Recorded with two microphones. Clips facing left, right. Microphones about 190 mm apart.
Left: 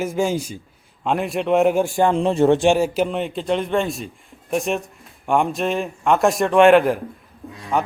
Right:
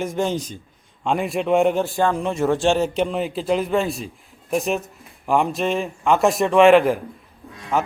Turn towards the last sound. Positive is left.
turn(degrees=0)  # may be behind; listen again after turning